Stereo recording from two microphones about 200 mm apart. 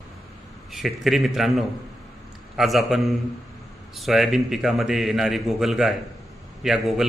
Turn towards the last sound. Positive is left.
turn(degrees=0)  # may be behind; listen again after turning